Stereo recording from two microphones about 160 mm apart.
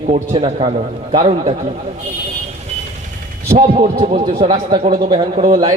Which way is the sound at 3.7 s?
40° right (ahead or behind).